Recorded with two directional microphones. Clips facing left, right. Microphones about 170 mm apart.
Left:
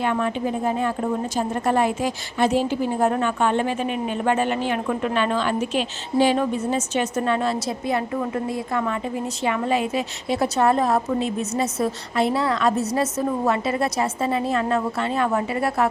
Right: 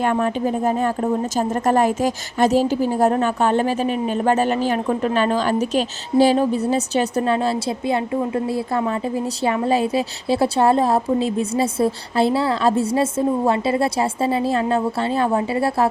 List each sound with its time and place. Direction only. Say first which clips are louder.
0.0 s a woman's voice: right 3 dB; 40° right (ahead or behind)